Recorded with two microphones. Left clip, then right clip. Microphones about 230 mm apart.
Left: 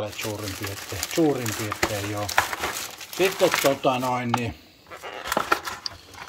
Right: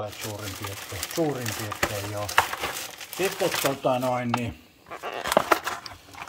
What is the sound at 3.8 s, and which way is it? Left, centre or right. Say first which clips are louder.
Speech: left 1 dB; centre.